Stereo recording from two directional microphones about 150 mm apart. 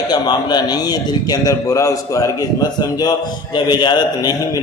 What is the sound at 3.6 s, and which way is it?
Speech, 30° left (ahead or behind).